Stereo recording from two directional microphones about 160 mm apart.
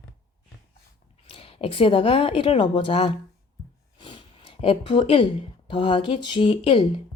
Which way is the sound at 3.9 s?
30° left (ahead or behind).